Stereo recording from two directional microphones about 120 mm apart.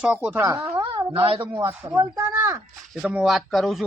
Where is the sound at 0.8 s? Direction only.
50° right (ahead or behind).